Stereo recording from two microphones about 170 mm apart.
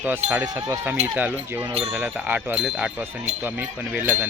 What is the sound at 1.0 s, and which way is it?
Speech, 10° right (ahead or behind).